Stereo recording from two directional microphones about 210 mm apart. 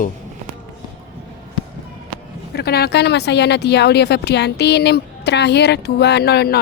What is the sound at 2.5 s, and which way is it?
Speech, 50° left (ahead or behind).